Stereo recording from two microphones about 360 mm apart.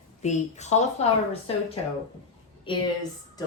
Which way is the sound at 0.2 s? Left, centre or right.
Centre.